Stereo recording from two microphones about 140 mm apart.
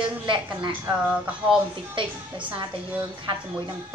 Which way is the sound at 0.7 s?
10° right (ahead or behind).